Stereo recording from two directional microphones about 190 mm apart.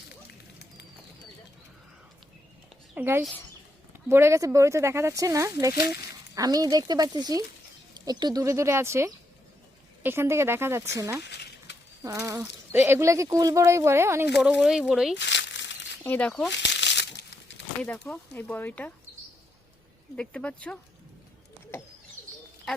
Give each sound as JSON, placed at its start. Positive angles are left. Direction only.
{"t": 2.9, "sound": "speech", "side_deg": -10}
{"t": 11.2, "sound": "a sound", "side_deg": 60}
{"t": 12.0, "sound": "speech", "side_deg": -15}
{"t": 15.1, "sound": "crumpling", "side_deg": 65}
{"t": 16.0, "sound": "speech", "side_deg": 5}
{"t": 16.5, "sound": "crumpling", "side_deg": 65}
{"t": 17.8, "sound": "speech", "side_deg": 5}
{"t": 20.1, "sound": "speech", "side_deg": 5}